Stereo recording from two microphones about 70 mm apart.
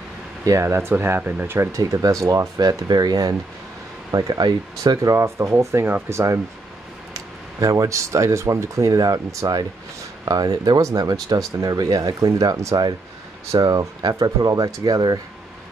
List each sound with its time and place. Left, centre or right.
0.5 s speech: right
1.7 s speech: right
4.9 s speech: right
7.2 s speech: right
10.2 s speech: right
13.6 s speech: right